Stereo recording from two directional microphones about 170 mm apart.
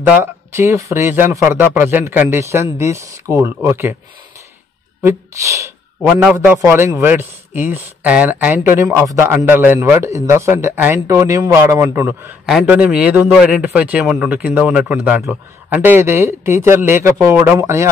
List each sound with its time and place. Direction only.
0.0 s a man's voice: 10° right (ahead or behind)
5.0 s a man's voice: 15° right (ahead or behind)